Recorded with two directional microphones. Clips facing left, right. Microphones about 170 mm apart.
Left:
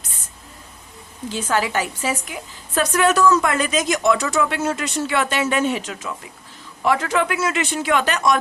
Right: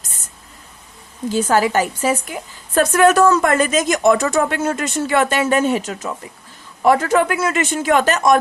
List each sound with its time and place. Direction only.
1.3 s a woman's voice: 40° right (ahead or behind)